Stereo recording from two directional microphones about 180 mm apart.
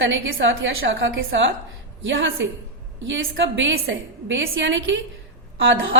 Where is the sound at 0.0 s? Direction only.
90° right.